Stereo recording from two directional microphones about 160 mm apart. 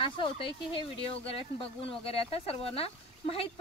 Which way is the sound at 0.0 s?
35° left (ahead or behind).